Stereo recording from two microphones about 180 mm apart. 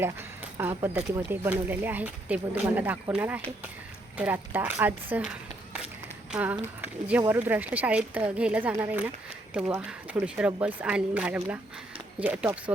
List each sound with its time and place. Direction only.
0.5 s speech: 15° right (ahead or behind)